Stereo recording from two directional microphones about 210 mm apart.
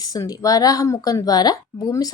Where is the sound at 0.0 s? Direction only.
15° left (ahead or behind).